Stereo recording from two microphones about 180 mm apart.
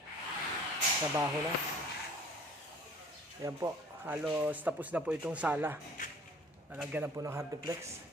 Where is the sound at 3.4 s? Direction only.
15° right (ahead or behind).